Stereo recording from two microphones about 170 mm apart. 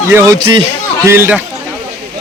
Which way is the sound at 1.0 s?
15° right (ahead or behind).